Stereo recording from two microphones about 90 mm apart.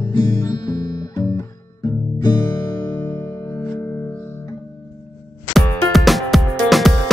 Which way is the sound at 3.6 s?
15° left (ahead or behind).